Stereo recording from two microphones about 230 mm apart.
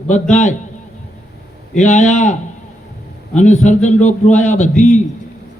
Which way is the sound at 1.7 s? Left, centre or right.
Left.